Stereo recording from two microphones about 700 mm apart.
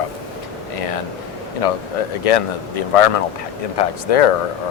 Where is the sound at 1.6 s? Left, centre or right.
Left.